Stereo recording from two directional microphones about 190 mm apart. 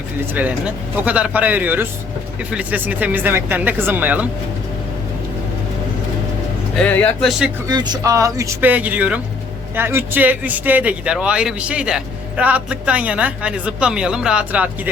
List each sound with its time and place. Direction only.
0.3 s speech: 10° right (ahead or behind)
6.7 s speech: 10° left (ahead or behind)
7.7 s speech: 20° right (ahead or behind); by 14.7 s 5° right (ahead or behind)